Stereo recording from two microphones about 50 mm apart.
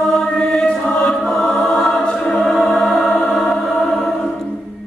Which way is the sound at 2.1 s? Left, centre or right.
Centre.